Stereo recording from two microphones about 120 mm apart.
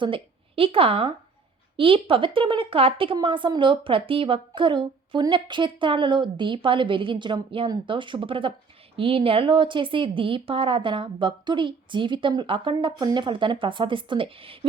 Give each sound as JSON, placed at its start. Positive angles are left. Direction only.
{"t": 0.0, "sound": "a woman's voice", "side_deg": -50}